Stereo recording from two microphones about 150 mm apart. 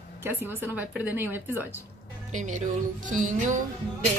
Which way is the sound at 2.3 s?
55° right (ahead or behind).